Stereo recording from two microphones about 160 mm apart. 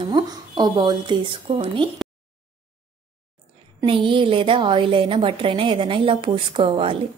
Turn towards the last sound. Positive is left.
turn(degrees=-35)  # may be behind; listen again after turning